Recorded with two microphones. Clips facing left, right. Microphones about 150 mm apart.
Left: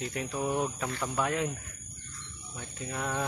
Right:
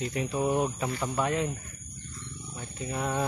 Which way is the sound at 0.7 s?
5° right (ahead or behind).